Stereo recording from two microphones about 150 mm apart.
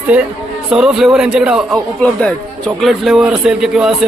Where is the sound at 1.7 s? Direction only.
5° left (ahead or behind).